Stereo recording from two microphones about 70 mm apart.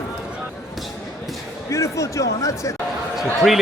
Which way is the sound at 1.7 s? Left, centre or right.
Left.